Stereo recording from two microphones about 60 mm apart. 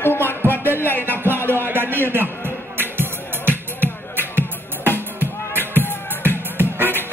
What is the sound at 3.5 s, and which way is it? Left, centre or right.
Music, left.